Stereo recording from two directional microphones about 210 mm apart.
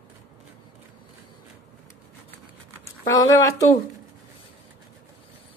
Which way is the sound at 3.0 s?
15° left (ahead or behind).